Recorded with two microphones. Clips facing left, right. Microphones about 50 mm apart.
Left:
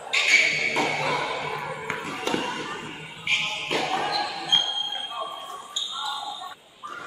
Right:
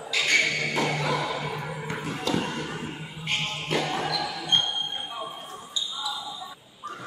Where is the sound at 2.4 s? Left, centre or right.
Centre.